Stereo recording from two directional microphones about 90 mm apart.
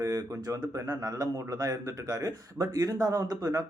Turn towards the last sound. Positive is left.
turn(degrees=-40)  # may be behind; listen again after turning